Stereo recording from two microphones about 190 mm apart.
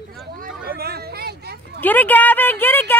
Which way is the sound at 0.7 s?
55° right (ahead or behind).